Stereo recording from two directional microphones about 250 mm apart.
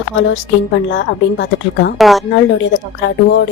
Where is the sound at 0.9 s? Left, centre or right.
Left.